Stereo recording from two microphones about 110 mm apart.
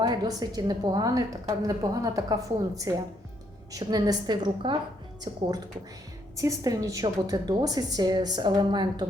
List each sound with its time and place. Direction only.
0.0 s a woman's voice: 40° right (ahead or behind)